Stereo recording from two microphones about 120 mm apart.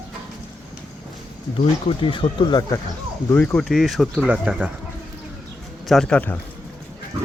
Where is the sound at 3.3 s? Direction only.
15° left (ahead or behind).